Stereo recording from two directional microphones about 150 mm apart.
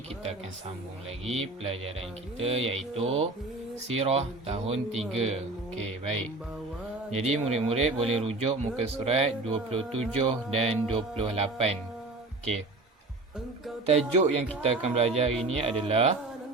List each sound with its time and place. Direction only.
1.2 s mantra: 45° right (ahead or behind)
3.8 s speech: 45° right (ahead or behind)
8.8 s mantra: 40° right (ahead or behind)
13.8 s speech: 45° right (ahead or behind)
15.3 s speech: 5° left (ahead or behind)
15.5 s mantra: 40° right (ahead or behind)